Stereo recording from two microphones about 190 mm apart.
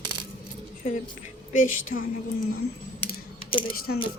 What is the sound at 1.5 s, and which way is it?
Speech, 45° left (ahead or behind).